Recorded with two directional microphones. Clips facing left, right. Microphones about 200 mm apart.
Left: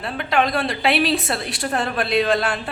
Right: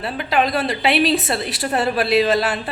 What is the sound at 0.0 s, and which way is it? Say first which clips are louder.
A woman's voice: right 1 dB; 5° right (ahead or behind).